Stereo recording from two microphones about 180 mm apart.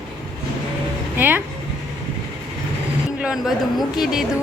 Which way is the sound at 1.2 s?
10° right (ahead or behind).